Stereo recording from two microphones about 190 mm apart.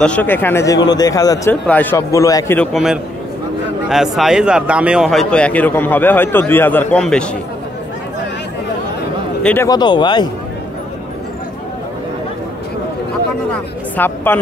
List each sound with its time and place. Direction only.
0.0 s speech: 5° left (ahead or behind)
9.4 s speech: 10° left (ahead or behind)
9.7 s speech: 25° left (ahead or behind)
13.5 s speech: 10° left (ahead or behind)